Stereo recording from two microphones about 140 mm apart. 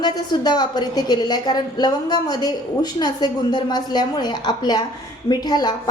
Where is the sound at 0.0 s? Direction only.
30° left (ahead or behind).